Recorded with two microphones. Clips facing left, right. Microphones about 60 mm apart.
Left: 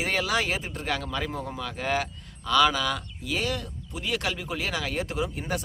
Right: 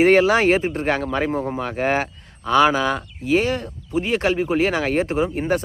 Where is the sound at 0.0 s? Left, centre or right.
Right.